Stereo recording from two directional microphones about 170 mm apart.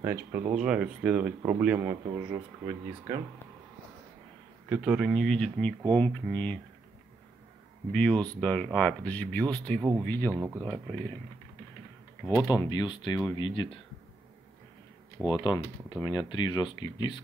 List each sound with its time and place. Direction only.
0.0 s speech: 15° right (ahead or behind)
4.6 s speech: 5° right (ahead or behind)
7.9 s speech: 5° left (ahead or behind)
9.8 s speech: 15° right (ahead or behind)
10.0 s speech: 10° left (ahead or behind)
10.3 s speech: 10° right (ahead or behind)
10.6 s speech: 10° left (ahead or behind)
12.4 s speech: 20° left (ahead or behind)
15.4 s speech: 20° left (ahead or behind)